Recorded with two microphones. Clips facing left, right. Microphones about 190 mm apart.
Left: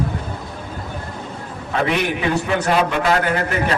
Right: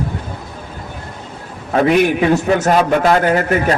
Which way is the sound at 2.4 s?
45° right (ahead or behind).